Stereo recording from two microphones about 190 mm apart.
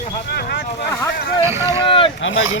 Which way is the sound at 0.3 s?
60° left (ahead or behind).